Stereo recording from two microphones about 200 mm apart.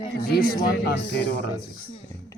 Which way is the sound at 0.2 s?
50° left (ahead or behind).